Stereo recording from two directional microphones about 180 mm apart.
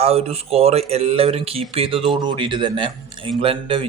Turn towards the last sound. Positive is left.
turn(degrees=-30)  # may be behind; listen again after turning